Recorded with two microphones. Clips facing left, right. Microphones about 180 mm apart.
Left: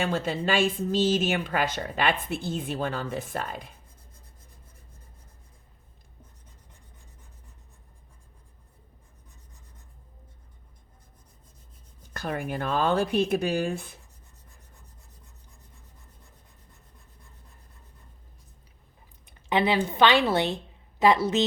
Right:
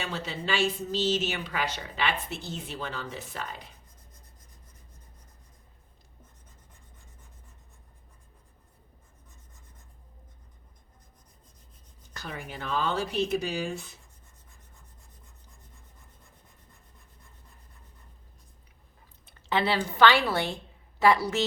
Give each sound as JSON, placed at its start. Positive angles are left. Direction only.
{"t": 0.0, "sound": "a woman's voice", "side_deg": 50}
{"t": 12.1, "sound": "speech", "side_deg": 55}
{"t": 19.2, "sound": "a woman's voice", "side_deg": 15}